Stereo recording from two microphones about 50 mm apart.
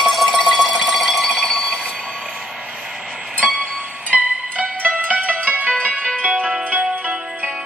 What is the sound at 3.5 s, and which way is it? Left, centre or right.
Music, right.